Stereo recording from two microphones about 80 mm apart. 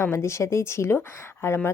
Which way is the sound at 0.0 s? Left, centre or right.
Left.